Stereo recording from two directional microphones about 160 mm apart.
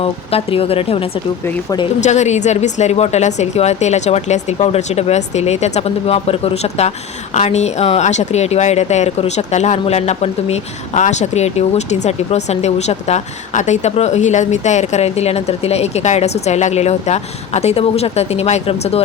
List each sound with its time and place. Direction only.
0.0 s speech: 35° left (ahead or behind)